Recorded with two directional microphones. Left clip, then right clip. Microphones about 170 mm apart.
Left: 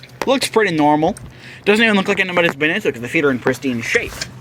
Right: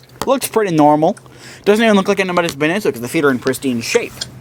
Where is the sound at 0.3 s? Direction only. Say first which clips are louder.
Even; 40° right (ahead or behind); by 4.1 s 20° right (ahead or behind).